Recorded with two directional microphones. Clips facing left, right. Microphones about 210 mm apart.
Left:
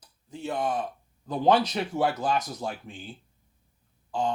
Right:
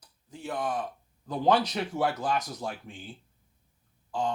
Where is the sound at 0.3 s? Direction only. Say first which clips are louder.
Left 3 dB; 25° left (ahead or behind).